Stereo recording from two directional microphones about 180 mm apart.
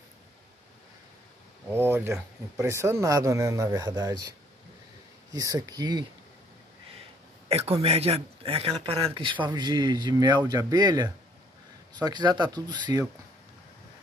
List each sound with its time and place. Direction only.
1.7 s speech: 10° right (ahead or behind)
5.3 s speech: 20° right (ahead or behind)
7.4 s speech: 35° right (ahead or behind)